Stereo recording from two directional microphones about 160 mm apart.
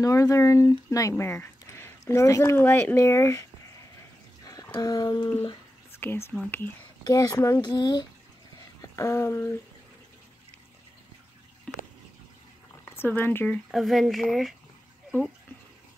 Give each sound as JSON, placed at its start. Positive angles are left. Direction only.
{"t": 0.0, "sound": "speech", "side_deg": 20}
{"t": 4.7, "sound": "speech", "side_deg": 25}
{"t": 5.9, "sound": "whispering", "side_deg": 15}
{"t": 7.1, "sound": "speech", "side_deg": 20}
{"t": 11.7, "sound": "a sound", "side_deg": 5}
{"t": 12.8, "sound": "speech", "side_deg": 15}
{"t": 13.7, "sound": "speech", "side_deg": 0}